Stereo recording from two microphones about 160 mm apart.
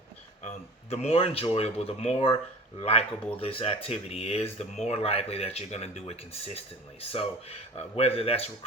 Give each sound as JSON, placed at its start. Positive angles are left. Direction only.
{"t": 0.4, "sound": "speech", "side_deg": 40}